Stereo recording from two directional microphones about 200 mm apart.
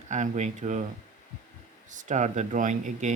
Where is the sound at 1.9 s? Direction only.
40° right (ahead or behind).